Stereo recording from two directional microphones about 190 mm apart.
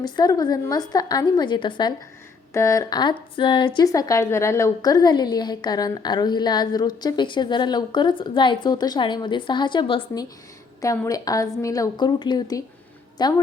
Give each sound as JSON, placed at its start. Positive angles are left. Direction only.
{"t": 0.0, "sound": "a woman's voice", "side_deg": 20}